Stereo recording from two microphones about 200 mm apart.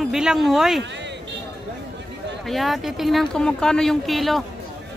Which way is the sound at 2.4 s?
Centre (ahead or behind).